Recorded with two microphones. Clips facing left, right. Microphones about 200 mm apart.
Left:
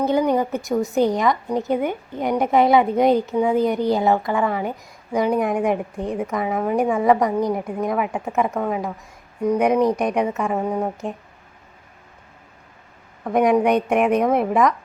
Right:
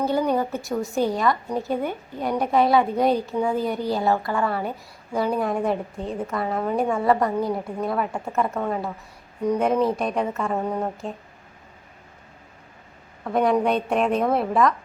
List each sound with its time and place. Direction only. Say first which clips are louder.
0.0 s a woman's voice: left 3 dB; 15° left (ahead or behind)
13.2 s a woman's voice: left 3 dB; 15° left (ahead or behind)